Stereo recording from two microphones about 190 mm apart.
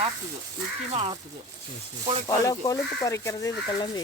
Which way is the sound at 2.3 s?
20° left (ahead or behind).